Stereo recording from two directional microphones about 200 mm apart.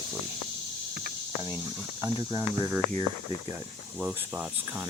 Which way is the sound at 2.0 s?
20° right (ahead or behind).